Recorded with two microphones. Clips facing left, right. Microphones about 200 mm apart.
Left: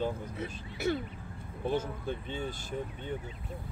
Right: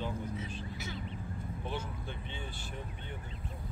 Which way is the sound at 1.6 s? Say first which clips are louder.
Left 10 dB; 40° left (ahead or behind).